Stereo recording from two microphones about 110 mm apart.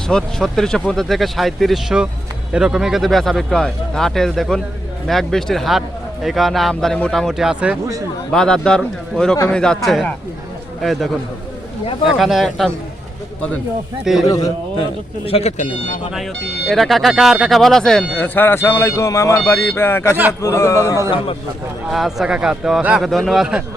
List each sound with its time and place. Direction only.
0.1 s speech: 5° left (ahead or behind)
8.3 s a man's voice: 5° left (ahead or behind)
12.1 s speech: centre (ahead or behind)
14.0 s speech: 5° right (ahead or behind)
14.3 s speech: 35° left (ahead or behind)
15.2 s speech: 65° left (ahead or behind)
16.1 s speech: centre (ahead or behind)
18.1 s speech: 20° left (ahead or behind)
21.9 s speech: 5° right (ahead or behind)